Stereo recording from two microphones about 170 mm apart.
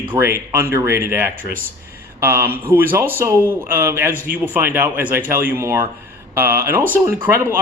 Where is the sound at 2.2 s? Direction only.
15° right (ahead or behind).